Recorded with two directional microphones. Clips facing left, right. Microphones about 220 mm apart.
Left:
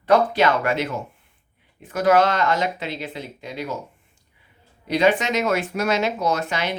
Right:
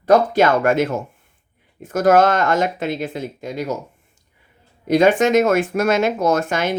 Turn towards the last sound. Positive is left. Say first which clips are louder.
# right 5 dB
turn(degrees=-50)  # may be behind; listen again after turning